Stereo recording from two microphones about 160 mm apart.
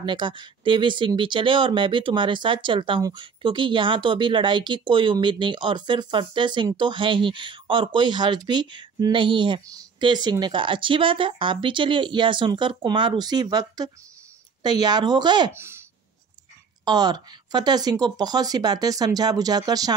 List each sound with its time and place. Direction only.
0.0 s speech: 30° right (ahead or behind)
15.5 s speech: 15° right (ahead or behind)
16.8 s speech: 25° right (ahead or behind)